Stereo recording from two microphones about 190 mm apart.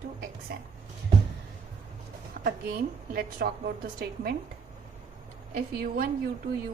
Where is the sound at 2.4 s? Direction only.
50° right (ahead or behind).